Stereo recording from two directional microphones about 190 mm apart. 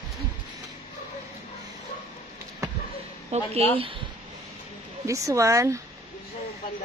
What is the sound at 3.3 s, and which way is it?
Speech, 30° right (ahead or behind).